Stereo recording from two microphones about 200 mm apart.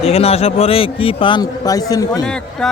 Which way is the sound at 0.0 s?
30° left (ahead or behind).